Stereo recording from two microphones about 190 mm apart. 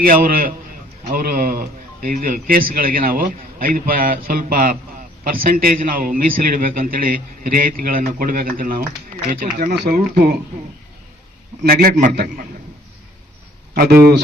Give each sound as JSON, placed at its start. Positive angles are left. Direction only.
{"t": 0.0, "sound": "a man's voice", "side_deg": -50}
{"t": 11.6, "sound": "a man's voice", "side_deg": -50}
{"t": 13.7, "sound": "speech", "side_deg": -55}